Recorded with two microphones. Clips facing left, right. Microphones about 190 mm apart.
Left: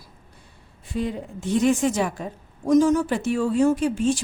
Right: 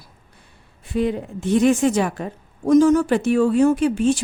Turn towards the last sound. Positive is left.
turn(degrees=-65)  # may be behind; listen again after turning